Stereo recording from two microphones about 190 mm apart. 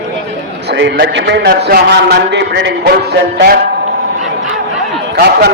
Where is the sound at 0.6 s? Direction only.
65° right (ahead or behind).